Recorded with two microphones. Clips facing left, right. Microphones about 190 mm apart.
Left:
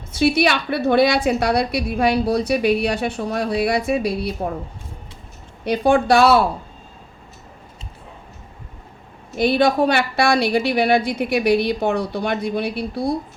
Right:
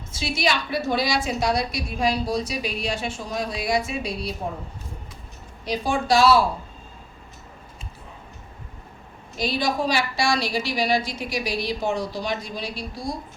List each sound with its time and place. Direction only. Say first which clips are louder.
0.1 s a woman's voice: left 8 dB; 60° left (ahead or behind)
5.6 s a woman's voice: left 7 dB; 60° left (ahead or behind)
9.4 s a woman's voice: left 8 dB; 60° left (ahead or behind)